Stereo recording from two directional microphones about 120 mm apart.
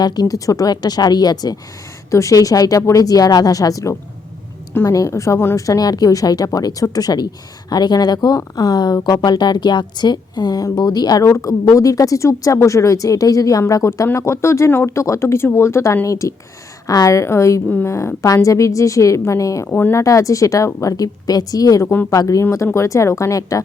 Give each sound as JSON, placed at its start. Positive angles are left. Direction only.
{"t": 0.0, "sound": "speech", "side_deg": 30}
{"t": 17.7, "sound": "speech", "side_deg": 15}
{"t": 17.9, "sound": "speech", "side_deg": 25}
{"t": 19.6, "sound": "speech", "side_deg": 15}